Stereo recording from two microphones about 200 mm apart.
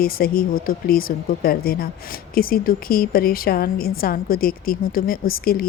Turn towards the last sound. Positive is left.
turn(degrees=45)  # may be behind; listen again after turning